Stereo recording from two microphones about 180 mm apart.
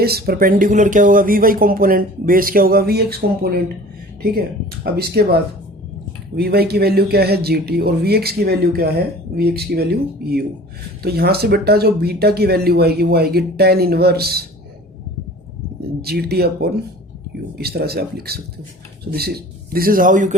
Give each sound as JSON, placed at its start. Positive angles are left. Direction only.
{"t": 0.0, "sound": "speech", "side_deg": -60}
{"t": 16.0, "sound": "speech", "side_deg": -60}